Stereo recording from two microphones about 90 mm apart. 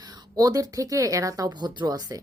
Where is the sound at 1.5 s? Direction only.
55° right (ahead or behind).